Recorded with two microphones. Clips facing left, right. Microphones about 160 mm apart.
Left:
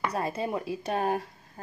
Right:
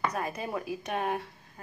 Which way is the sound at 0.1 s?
30° left (ahead or behind).